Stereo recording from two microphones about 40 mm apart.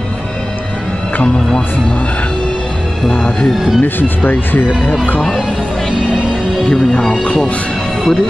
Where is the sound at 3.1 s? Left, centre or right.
Left.